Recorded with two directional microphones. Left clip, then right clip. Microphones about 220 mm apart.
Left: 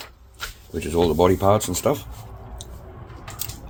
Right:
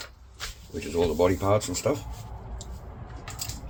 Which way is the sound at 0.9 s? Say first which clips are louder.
Left 5 dB; 45° left (ahead or behind).